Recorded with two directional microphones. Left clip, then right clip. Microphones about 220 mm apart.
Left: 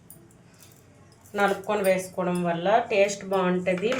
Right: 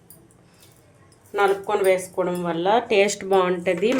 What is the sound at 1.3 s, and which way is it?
Speech, 35° right (ahead or behind).